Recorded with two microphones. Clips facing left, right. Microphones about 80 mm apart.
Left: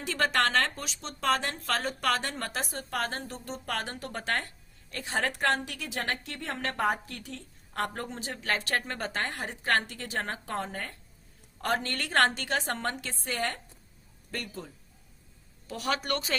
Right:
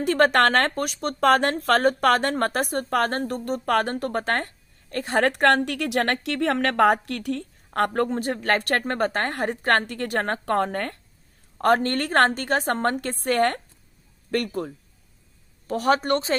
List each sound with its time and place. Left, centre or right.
0.0 s speech: right
11.5 s speech: right
15.6 s a woman's voice: right